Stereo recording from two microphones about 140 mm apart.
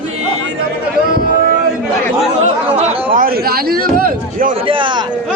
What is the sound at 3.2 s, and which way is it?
A man's voice, 90° right.